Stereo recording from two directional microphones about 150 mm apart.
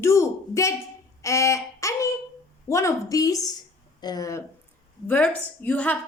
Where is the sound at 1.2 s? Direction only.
20° left (ahead or behind).